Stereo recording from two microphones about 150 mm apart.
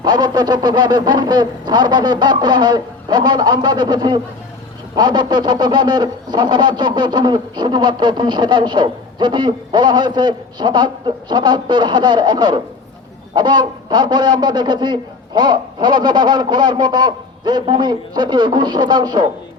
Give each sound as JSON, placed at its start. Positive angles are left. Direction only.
{"t": 0.0, "sound": "speech", "side_deg": -30}